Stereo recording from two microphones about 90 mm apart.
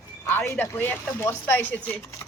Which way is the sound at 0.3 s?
20° left (ahead or behind).